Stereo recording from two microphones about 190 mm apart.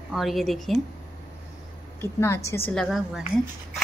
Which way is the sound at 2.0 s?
15° left (ahead or behind).